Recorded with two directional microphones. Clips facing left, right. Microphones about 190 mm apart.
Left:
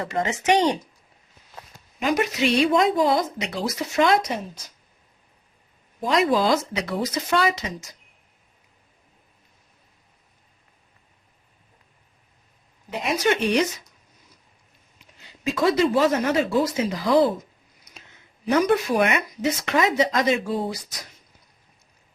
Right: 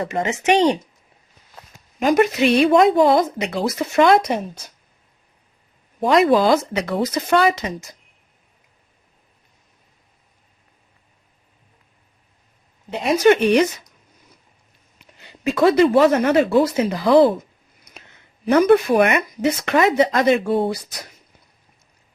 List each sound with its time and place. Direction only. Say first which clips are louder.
0.0 s speech: right 3 dB; 15° right (ahead or behind)
2.0 s speech: right 6 dB; 45° right (ahead or behind)
6.0 s speech: right 6 dB; 60° right (ahead or behind)
13.1 s speech: right 7 dB; 55° right (ahead or behind)
15.2 s speech: right 6 dB; 60° right (ahead or behind)
18.4 s speech: right 6 dB; 55° right (ahead or behind)